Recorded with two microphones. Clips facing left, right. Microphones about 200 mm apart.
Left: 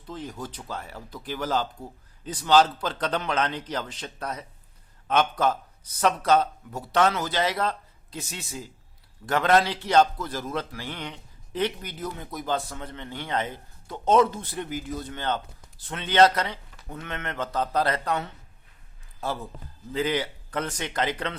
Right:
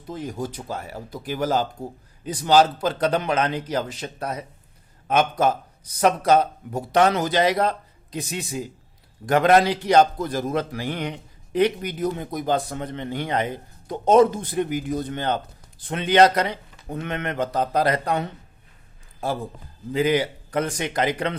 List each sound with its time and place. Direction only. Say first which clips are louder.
0.0 s a man's voice: right 6 dB; 10° right (ahead or behind)
19.9 s a man's voice: right 6 dB; 10° right (ahead or behind)